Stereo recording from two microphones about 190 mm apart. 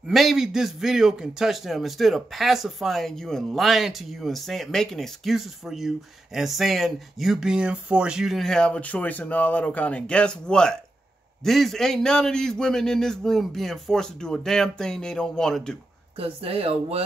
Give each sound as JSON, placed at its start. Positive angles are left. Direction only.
{"t": 0.1, "sound": "a man's voice", "side_deg": 0}
{"t": 16.2, "sound": "speech", "side_deg": -30}